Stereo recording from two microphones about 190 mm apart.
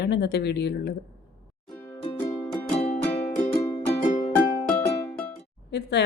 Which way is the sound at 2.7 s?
35° left (ahead or behind).